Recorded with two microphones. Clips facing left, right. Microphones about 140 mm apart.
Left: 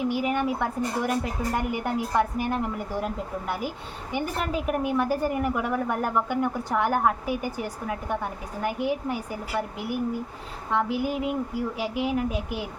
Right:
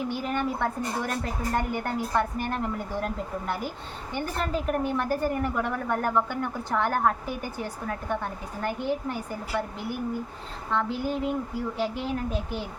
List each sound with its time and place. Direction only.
0.1 s a woman's voice: 10° left (ahead or behind)